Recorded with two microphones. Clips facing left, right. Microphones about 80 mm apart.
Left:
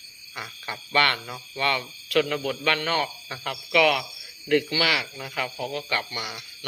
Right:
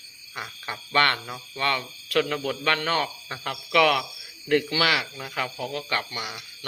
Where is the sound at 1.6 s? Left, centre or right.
Right.